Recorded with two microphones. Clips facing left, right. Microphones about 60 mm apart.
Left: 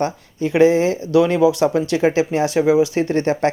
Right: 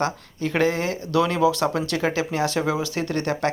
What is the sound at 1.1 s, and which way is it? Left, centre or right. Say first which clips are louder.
Speech: left 5 dB; centre.